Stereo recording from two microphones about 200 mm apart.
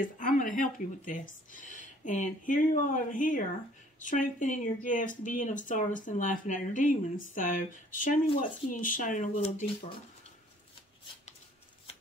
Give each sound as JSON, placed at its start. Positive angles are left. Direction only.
{"t": 0.2, "sound": "speech", "side_deg": 40}